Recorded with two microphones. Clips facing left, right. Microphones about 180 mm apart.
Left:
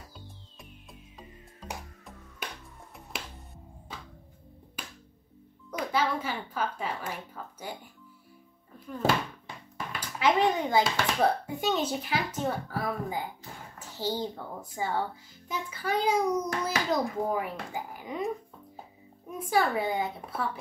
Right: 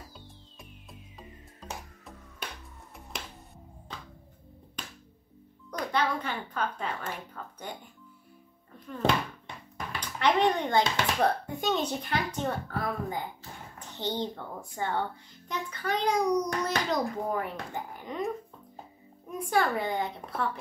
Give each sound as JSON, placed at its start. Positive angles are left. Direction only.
{"t": 0.6, "sound": "music", "side_deg": 0}
{"t": 5.7, "sound": "a woman's voice", "side_deg": 5}
{"t": 8.7, "sound": "a child's voice", "side_deg": 5}
{"t": 19.3, "sound": "a child's voice", "side_deg": 5}